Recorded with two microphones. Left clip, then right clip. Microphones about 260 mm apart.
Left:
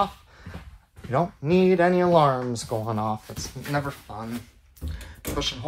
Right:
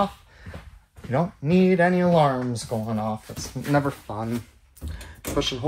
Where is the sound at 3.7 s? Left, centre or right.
Centre.